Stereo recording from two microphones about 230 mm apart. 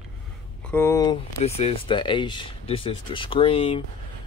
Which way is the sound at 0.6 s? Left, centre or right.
Centre.